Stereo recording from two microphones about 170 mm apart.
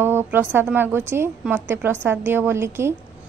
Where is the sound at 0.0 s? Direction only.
15° right (ahead or behind).